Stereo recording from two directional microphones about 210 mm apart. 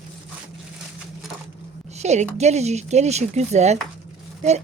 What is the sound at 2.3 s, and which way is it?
Speech, 30° right (ahead or behind).